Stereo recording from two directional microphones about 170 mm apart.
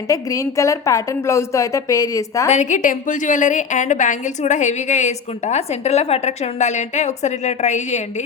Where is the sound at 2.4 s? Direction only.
45° left (ahead or behind).